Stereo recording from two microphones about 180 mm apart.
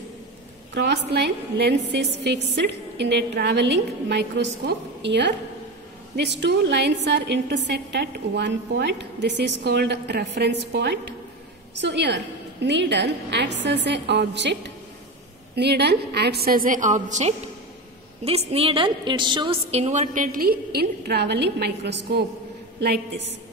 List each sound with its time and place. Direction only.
0.7 s a woman's voice: 65° right (ahead or behind)